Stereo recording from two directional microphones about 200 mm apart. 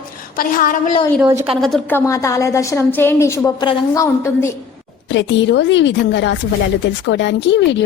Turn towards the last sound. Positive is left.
turn(degrees=65)  # may be behind; listen again after turning